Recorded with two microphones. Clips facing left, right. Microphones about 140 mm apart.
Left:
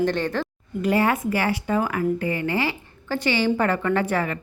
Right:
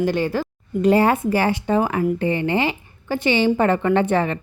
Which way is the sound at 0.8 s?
30° right (ahead or behind).